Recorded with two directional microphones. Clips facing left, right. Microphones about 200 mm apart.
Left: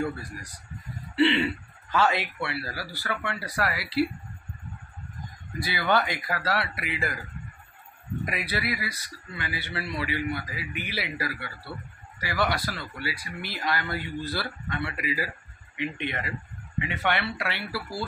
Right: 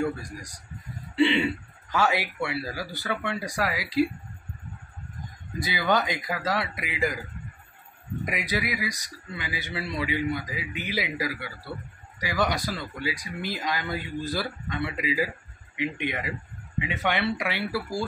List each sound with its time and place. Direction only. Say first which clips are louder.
1.2 s speech: even; 15° right (ahead or behind)
5.6 s speech: even; 15° right (ahead or behind)
8.3 s speech: right 2 dB; 15° right (ahead or behind)